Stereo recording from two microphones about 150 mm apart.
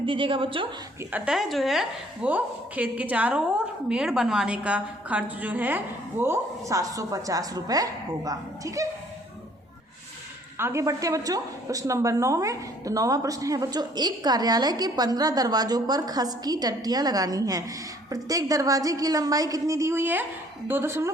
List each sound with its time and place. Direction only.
0.0 s a woman's voice: 35° right (ahead or behind)
1.1 s a woman's voice: 5° right (ahead or behind); by 8.9 s 20° right (ahead or behind)
10.6 s a woman's voice: 20° right (ahead or behind)